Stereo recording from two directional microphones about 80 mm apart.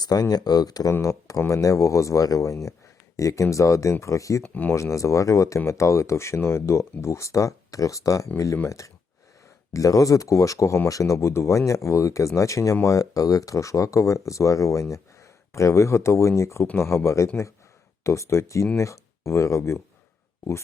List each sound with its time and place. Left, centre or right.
0.0 s speech: left
4.4 s speech: left
4.7 s speech: left